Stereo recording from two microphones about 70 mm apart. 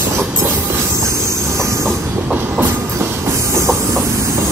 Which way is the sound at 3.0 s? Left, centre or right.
Right.